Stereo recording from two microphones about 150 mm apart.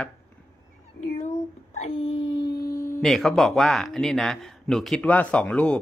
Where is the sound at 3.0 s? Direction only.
Centre (ahead or behind).